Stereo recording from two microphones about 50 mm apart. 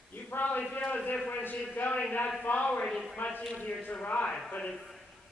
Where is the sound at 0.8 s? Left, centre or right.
Left.